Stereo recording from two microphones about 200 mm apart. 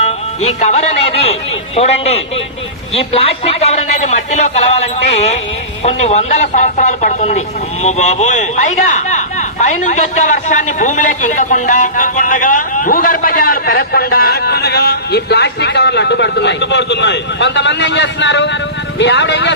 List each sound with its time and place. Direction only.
0.0 s a man's voice: 35° left (ahead or behind)
5.8 s a man's voice: 35° left (ahead or behind); by 19.5 s 60° left (ahead or behind)